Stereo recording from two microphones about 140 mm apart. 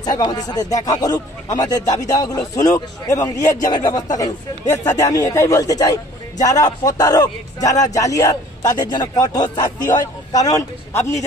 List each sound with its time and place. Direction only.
0.0 s a man's voice: 30° left (ahead or behind)
4.9 s a man's voice: 25° left (ahead or behind)